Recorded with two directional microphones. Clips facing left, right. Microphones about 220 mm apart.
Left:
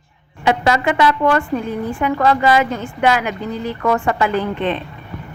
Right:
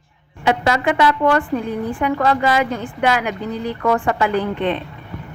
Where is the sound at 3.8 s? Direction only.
35° right (ahead or behind).